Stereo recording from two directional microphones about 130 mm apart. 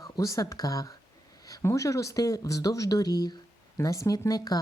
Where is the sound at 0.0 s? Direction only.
25° left (ahead or behind).